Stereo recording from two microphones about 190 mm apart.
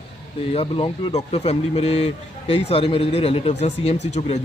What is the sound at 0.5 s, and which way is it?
Speech, 30° left (ahead or behind).